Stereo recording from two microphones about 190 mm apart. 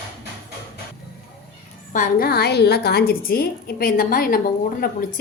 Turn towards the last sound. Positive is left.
turn(degrees=50)  # may be behind; listen again after turning